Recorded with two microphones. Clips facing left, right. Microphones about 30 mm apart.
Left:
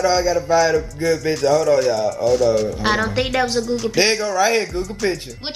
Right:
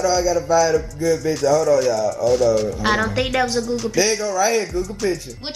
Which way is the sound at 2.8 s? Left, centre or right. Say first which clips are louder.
Even; centre.